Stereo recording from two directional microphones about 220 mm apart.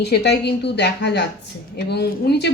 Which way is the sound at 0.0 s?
50° left (ahead or behind).